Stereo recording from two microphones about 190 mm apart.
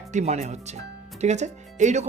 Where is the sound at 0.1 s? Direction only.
35° right (ahead or behind).